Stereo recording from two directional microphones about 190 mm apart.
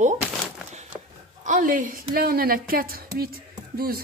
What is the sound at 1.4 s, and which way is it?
A woman's voice, 45° right (ahead or behind).